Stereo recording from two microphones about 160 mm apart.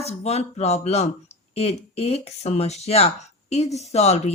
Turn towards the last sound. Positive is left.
turn(degrees=45)  # may be behind; listen again after turning